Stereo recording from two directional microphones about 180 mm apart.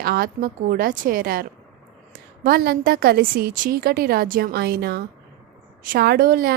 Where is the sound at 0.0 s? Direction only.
55° right (ahead or behind).